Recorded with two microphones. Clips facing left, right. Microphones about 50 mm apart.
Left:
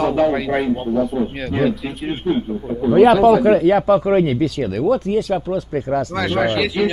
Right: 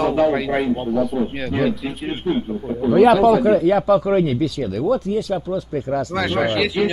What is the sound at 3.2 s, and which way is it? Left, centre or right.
Speech, left.